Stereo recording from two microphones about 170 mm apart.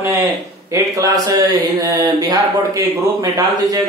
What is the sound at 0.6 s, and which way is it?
Mantra, 20° right (ahead or behind).